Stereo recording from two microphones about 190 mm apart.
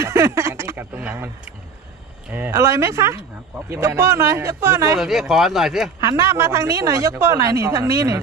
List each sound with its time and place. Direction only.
0.0 s a sound: 15° right (ahead or behind)
2.3 s a woman's voice: 10° right (ahead or behind)
4.9 s speech: centre (ahead or behind)
6.0 s a woman's voice: 15° right (ahead or behind)